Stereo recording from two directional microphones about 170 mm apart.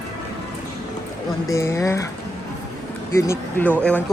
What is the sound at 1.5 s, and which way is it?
Speech, 20° left (ahead or behind).